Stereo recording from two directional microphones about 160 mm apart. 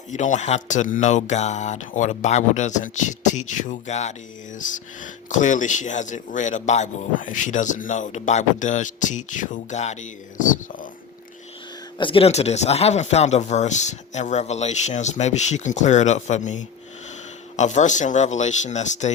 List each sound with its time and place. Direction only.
0.1 s speech: 50° left (ahead or behind)
11.9 s speech: 35° left (ahead or behind)